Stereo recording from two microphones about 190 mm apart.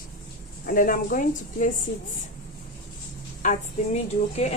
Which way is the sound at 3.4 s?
40° left (ahead or behind).